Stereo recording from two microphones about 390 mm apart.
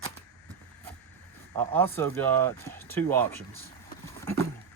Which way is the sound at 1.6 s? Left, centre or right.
Centre.